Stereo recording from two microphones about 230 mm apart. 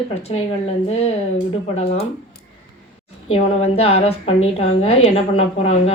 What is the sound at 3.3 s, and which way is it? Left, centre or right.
Speech, left.